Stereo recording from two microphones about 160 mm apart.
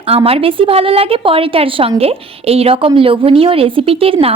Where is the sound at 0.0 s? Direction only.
35° right (ahead or behind).